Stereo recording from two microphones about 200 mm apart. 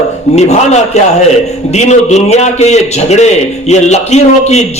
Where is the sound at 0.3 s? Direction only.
35° left (ahead or behind).